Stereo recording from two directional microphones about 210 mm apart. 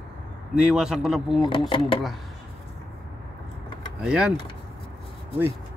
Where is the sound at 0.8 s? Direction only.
5° right (ahead or behind).